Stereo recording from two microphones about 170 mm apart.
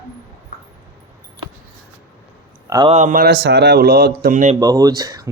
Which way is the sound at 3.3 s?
85° right.